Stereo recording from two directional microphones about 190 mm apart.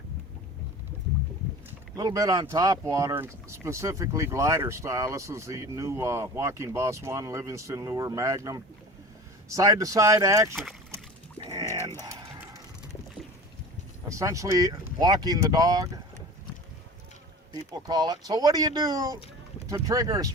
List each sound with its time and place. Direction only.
2.0 s speech: 20° right (ahead or behind)
10.5 s speech: centre (ahead or behind)
10.9 s music: 20° right (ahead or behind)
11.9 s typing: 15° right (ahead or behind)
14.1 s speech: 15° right (ahead or behind)
17.5 s speech: 20° right (ahead or behind)